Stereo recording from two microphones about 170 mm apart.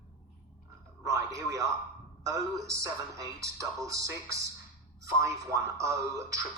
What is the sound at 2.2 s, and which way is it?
A man's voice, 20° right (ahead or behind).